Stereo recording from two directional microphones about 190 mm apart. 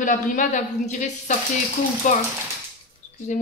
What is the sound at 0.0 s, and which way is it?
A woman's voice, 40° left (ahead or behind).